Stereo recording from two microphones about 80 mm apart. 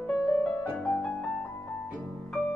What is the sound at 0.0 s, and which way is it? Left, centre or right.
Music, centre.